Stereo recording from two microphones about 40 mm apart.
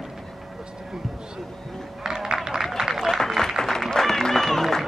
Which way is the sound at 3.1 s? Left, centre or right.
Centre.